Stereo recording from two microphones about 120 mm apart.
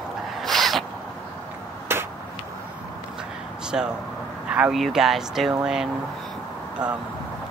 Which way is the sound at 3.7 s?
10° right (ahead or behind).